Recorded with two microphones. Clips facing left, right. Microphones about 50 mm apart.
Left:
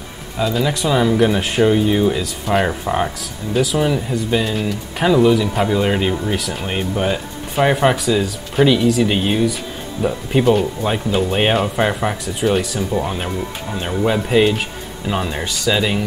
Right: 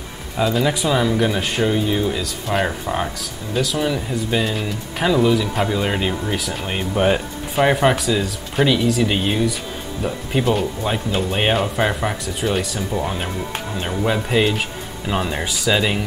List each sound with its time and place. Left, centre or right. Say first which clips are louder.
0.4 s speech: even; centre